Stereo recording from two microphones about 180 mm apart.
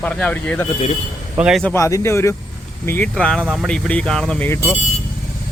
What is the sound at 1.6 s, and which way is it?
Speech, 15° left (ahead or behind).